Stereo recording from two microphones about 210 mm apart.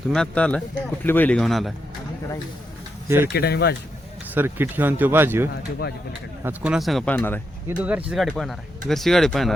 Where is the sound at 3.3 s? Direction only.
50° left (ahead or behind).